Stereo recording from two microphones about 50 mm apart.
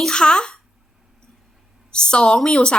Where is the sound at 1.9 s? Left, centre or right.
Centre.